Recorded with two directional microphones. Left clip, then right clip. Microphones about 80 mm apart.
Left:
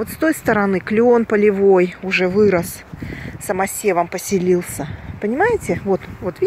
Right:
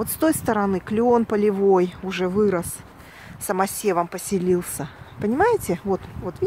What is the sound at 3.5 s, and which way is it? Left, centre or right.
Speech, right.